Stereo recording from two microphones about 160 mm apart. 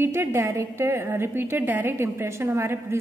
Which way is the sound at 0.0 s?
15° right (ahead or behind).